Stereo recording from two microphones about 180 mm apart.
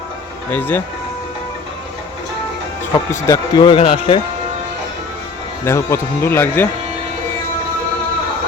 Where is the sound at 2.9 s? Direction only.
20° left (ahead or behind).